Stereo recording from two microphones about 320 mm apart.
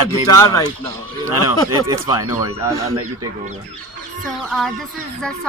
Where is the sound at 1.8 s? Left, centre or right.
Centre.